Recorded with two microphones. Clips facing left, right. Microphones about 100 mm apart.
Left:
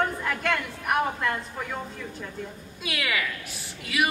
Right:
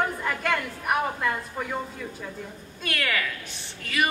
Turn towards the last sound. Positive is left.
turn(degrees=5)  # may be behind; listen again after turning